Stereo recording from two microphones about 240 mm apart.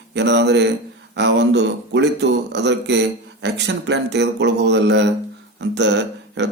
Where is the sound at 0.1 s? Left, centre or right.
Right.